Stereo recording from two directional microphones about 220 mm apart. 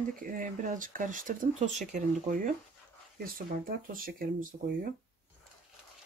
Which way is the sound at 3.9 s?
40° right (ahead or behind).